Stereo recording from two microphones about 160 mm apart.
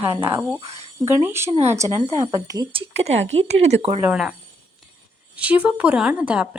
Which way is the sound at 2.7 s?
40° right (ahead or behind).